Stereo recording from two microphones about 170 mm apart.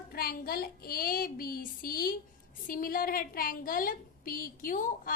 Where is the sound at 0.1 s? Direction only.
60° left (ahead or behind).